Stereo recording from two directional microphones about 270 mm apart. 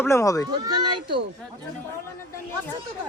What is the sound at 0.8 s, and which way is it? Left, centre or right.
Speech, centre.